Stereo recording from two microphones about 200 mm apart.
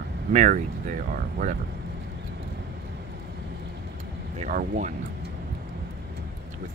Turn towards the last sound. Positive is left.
turn(degrees=-40)  # may be behind; listen again after turning